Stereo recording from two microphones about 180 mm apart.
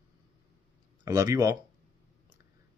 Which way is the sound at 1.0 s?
20° right (ahead or behind).